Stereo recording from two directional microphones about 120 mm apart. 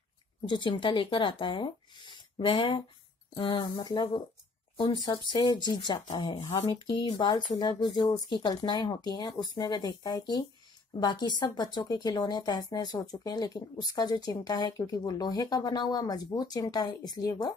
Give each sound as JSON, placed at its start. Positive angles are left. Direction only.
{"t": 0.5, "sound": "speech", "side_deg": 45}
{"t": 3.7, "sound": "speech", "side_deg": 30}